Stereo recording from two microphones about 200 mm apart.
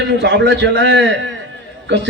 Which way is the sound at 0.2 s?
60° right (ahead or behind).